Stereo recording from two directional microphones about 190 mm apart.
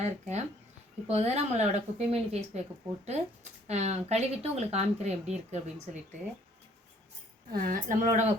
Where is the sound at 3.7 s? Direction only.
35° right (ahead or behind).